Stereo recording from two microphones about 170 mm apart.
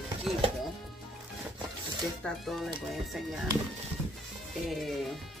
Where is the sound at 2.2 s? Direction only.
Centre (ahead or behind).